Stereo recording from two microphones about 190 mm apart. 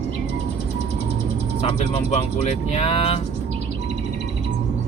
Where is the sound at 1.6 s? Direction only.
35° left (ahead or behind).